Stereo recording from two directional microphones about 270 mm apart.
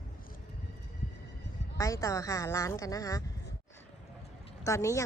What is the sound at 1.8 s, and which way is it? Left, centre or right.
Speech, centre.